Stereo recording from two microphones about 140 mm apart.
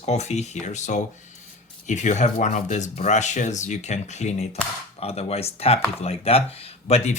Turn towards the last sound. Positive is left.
turn(degrees=50)  # may be behind; listen again after turning